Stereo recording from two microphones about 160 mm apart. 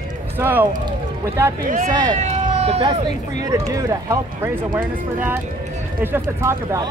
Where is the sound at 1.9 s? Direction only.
25° right (ahead or behind).